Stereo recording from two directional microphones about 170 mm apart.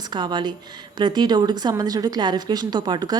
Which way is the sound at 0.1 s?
25° right (ahead or behind).